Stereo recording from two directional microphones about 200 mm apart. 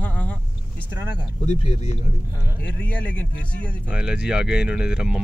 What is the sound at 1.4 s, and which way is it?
Speech, 30° left (ahead or behind).